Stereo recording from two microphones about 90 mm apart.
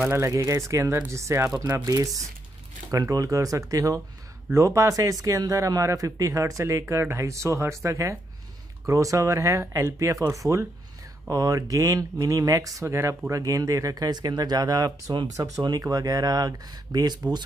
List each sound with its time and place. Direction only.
0.1 s speech: 30° right (ahead or behind); by 17.2 s 50° right (ahead or behind)